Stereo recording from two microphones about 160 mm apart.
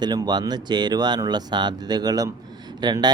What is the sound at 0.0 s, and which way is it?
Speech, 25° right (ahead or behind).